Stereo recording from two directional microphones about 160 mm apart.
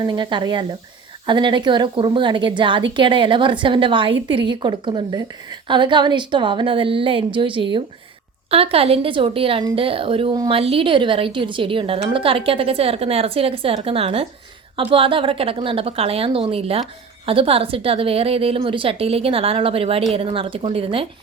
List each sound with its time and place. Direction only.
0.0 s a woman's voice: 30° right (ahead or behind)